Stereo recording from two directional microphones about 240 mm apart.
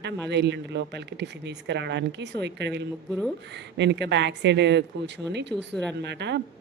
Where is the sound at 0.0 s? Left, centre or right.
Right.